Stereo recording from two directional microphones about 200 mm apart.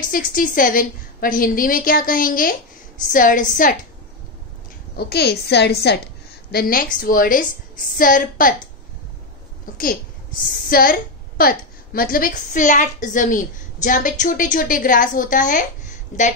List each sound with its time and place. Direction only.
0.1 s a woman's voice: 45° left (ahead or behind)
4.9 s a woman's voice: 55° left (ahead or behind)
10.7 s a woman's voice: 45° left (ahead or behind)